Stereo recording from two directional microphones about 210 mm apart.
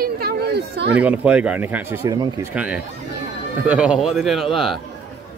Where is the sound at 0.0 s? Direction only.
50° right (ahead or behind).